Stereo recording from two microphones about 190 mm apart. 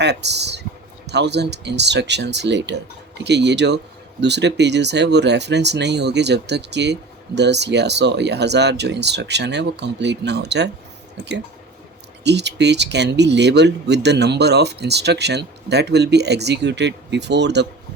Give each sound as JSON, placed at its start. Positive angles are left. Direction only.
{"t": 0.0, "sound": "speech", "side_deg": -65}
{"t": 12.2, "sound": "speech", "side_deg": -65}